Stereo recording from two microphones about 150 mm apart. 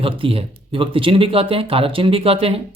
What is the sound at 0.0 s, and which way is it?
Speech, 40° right (ahead or behind).